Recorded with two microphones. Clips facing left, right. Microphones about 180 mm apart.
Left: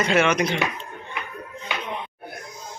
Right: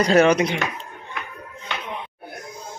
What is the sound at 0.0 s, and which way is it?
Speech, 35° right (ahead or behind).